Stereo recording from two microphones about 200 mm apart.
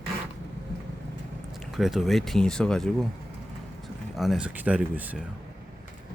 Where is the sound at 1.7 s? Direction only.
Centre (ahead or behind).